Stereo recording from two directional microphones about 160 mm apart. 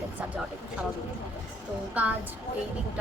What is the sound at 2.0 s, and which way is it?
Speech, 10° right (ahead or behind).